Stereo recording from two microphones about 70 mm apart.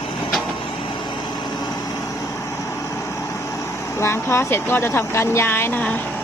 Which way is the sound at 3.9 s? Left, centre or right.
Left.